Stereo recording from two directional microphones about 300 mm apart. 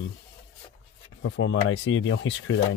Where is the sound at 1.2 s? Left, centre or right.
Left.